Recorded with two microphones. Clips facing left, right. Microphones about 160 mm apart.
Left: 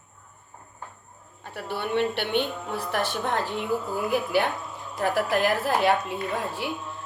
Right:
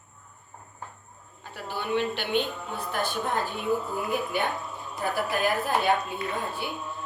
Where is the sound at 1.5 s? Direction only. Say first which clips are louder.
Left 2 dB; 65° left (ahead or behind); by 6.1 s 90° left.